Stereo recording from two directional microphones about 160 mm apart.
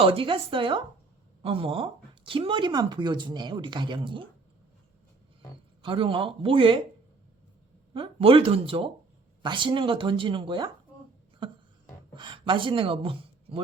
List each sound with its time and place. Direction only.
0.0 s speech: 35° right (ahead or behind)
5.8 s speech: 30° right (ahead or behind)
7.9 s speech: 35° right (ahead or behind)
11.4 s a sound: 30° right (ahead or behind)
12.1 s speech: 30° right (ahead or behind)